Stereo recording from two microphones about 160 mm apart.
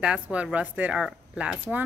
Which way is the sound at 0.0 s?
5° right (ahead or behind).